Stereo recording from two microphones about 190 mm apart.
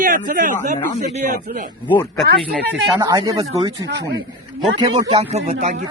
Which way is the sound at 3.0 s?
20° right (ahead or behind).